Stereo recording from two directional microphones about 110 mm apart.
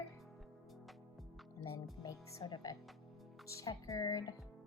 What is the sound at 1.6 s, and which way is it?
Speech, 30° left (ahead or behind).